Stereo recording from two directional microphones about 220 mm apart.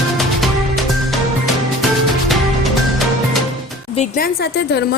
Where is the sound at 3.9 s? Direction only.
35° left (ahead or behind).